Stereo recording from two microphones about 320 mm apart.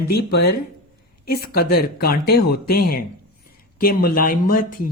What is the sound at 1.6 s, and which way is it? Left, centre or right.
Speech, left.